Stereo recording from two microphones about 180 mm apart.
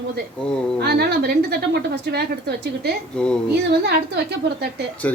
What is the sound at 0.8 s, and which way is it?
Speech, 65° right (ahead or behind).